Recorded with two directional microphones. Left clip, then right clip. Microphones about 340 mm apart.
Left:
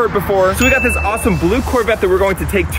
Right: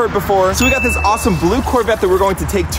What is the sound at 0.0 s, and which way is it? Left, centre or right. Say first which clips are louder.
Speech: even; centre.